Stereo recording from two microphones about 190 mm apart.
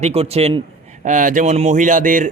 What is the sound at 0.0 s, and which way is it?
Speech, 35° right (ahead or behind).